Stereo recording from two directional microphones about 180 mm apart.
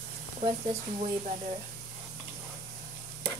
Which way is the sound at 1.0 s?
40° right (ahead or behind).